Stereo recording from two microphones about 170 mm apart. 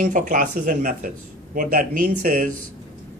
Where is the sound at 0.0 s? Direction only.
50° right (ahead or behind).